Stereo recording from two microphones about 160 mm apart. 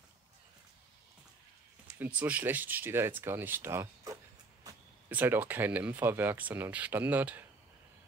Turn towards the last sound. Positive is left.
turn(degrees=-10)  # may be behind; listen again after turning